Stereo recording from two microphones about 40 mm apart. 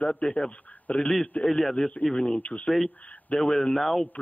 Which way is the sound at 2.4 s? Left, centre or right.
Left.